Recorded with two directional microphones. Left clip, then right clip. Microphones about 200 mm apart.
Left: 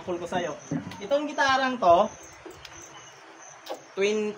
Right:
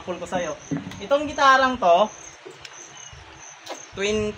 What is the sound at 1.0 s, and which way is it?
Speech, 20° right (ahead or behind).